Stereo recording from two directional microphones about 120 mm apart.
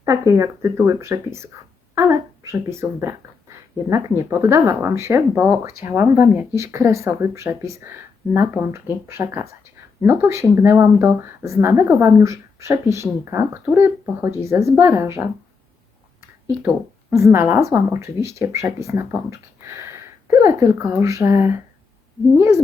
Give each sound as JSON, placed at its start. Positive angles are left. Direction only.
{"t": 0.0, "sound": "speech", "side_deg": -25}
{"t": 16.6, "sound": "speech", "side_deg": -20}